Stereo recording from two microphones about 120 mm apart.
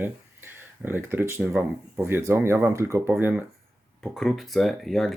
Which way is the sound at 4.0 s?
Centre (ahead or behind).